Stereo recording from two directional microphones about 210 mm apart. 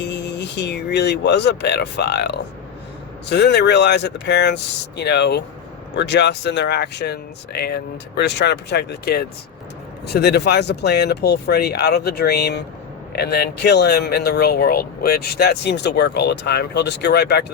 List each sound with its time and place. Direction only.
0.0 s speech: 55° left (ahead or behind)